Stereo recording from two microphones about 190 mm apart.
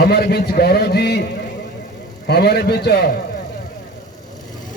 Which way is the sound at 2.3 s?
55° left (ahead or behind).